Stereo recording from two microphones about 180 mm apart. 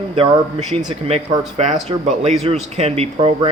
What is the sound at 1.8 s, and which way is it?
Speech, 40° right (ahead or behind).